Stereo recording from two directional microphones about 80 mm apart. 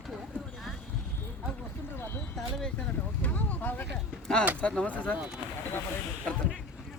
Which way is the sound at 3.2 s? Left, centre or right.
Centre.